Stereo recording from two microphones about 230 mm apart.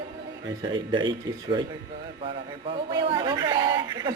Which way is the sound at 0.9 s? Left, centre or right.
Right.